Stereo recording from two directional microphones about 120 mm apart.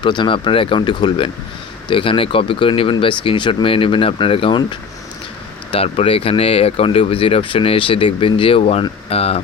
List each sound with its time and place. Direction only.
0.0 s speech: 40° left (ahead or behind)